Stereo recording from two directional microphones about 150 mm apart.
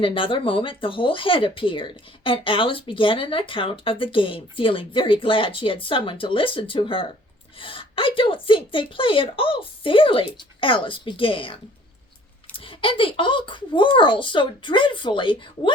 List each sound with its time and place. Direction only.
0.0 s speech: 35° left (ahead or behind)
12.5 s speech: 35° left (ahead or behind)